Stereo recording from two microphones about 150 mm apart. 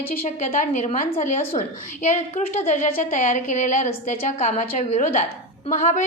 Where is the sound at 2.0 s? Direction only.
50° left (ahead or behind).